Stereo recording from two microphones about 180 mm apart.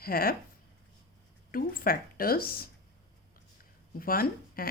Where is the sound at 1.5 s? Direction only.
50° left (ahead or behind).